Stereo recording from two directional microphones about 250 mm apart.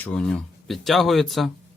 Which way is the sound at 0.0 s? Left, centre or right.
Centre.